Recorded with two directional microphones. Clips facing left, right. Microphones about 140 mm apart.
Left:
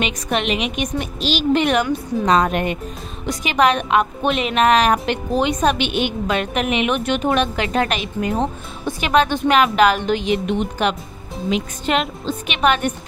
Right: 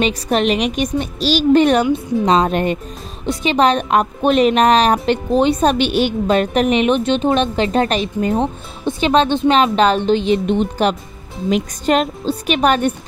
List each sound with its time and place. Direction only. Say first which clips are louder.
0.0 s a woman's voice: right 5 dB; 35° right (ahead or behind)